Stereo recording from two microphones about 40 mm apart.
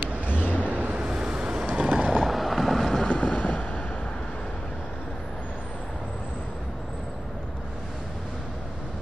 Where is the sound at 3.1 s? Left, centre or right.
Left.